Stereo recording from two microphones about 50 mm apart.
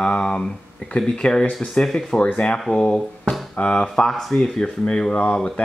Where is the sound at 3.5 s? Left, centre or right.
Left.